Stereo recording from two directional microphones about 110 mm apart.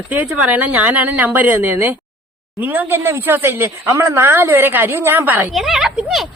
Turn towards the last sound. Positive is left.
turn(degrees=0)  # may be behind; listen again after turning